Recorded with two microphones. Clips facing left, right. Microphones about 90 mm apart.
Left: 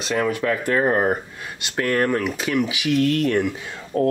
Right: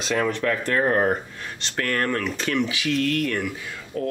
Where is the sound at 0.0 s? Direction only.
5° left (ahead or behind); by 3.8 s 25° left (ahead or behind).